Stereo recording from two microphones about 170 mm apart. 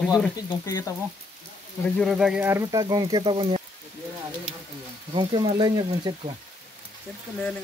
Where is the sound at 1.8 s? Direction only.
Centre (ahead or behind).